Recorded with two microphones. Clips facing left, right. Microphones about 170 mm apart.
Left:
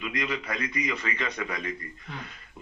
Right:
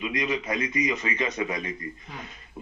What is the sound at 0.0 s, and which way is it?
A man's voice, 20° right (ahead or behind).